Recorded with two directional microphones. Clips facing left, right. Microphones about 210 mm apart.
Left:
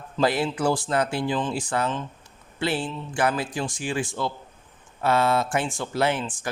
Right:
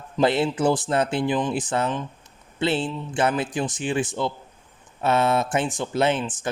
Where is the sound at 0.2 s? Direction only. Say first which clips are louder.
Right 3 dB; 25° right (ahead or behind).